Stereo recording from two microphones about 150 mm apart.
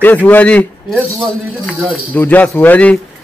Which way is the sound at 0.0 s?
10° left (ahead or behind).